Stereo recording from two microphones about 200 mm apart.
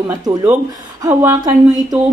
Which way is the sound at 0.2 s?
15° right (ahead or behind).